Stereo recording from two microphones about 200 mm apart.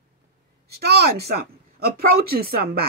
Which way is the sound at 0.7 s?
50° right (ahead or behind).